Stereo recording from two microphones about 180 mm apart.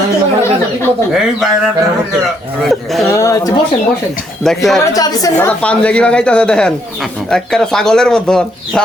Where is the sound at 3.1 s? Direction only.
15° left (ahead or behind).